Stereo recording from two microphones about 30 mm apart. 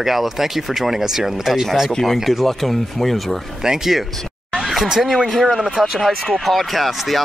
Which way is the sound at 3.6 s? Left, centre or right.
Centre.